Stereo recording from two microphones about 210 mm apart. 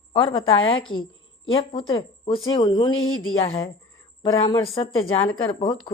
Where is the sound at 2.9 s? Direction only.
70° left (ahead or behind).